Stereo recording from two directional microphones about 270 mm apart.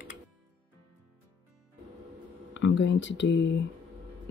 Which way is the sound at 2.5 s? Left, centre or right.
Left.